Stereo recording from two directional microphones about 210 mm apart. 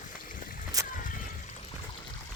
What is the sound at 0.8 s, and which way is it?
Splash, 15° right (ahead or behind).